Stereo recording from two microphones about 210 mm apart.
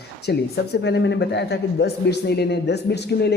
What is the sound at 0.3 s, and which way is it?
Speech, 50° left (ahead or behind).